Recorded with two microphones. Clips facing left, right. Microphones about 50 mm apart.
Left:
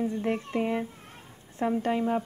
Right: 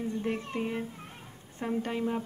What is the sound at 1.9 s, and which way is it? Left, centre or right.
Speech, centre.